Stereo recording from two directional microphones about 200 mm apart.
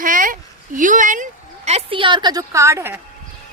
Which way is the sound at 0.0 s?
40° right (ahead or behind).